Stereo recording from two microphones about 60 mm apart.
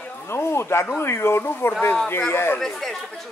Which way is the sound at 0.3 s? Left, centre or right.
Left.